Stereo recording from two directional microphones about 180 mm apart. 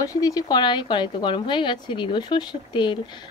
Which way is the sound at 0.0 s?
20° left (ahead or behind).